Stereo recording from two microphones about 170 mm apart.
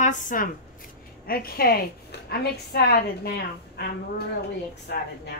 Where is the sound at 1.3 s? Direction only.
60° left (ahead or behind).